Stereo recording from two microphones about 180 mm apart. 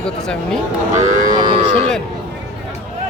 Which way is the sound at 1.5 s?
35° right (ahead or behind).